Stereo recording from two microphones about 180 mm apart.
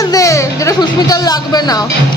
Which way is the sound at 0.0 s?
20° left (ahead or behind).